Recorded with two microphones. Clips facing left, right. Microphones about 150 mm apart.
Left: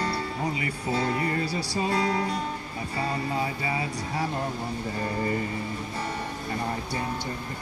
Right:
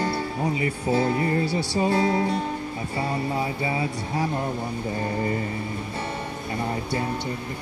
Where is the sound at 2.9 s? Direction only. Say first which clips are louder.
Right 2 dB; 25° right (ahead or behind).